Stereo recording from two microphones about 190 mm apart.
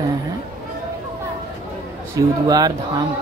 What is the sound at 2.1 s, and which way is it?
Speech, 20° right (ahead or behind).